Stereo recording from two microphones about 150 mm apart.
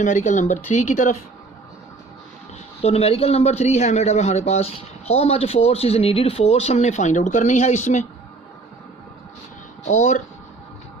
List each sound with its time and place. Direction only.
0.0 s speech: 55° left (ahead or behind)
2.8 s speech: 40° left (ahead or behind)
9.8 s speech: 50° left (ahead or behind)